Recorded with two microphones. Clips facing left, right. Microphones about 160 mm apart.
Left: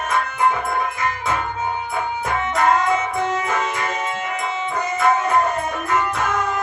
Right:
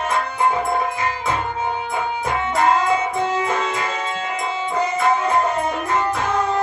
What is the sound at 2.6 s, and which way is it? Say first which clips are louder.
Music: even; 30° right (ahead or behind).